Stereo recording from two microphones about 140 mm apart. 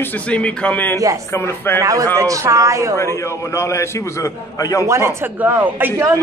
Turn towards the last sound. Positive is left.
turn(degrees=-15)  # may be behind; listen again after turning